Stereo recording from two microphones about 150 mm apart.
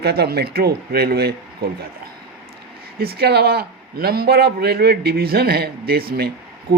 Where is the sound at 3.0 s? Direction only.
90° right.